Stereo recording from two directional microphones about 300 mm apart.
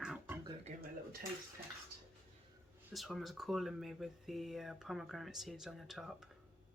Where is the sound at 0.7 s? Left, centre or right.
Right.